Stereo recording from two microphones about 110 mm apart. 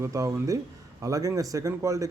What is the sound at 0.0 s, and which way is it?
A man's voice, 30° right (ahead or behind).